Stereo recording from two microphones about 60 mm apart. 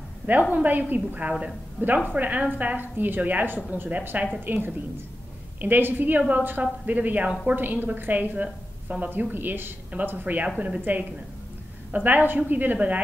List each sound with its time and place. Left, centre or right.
0.3 s a woman's voice: right